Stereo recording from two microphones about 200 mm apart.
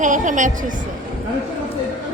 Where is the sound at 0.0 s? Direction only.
40° right (ahead or behind).